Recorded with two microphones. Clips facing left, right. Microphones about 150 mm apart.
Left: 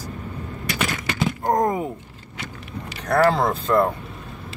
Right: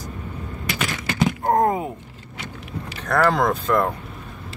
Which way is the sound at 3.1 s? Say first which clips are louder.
Left 1 dB; 30° left (ahead or behind).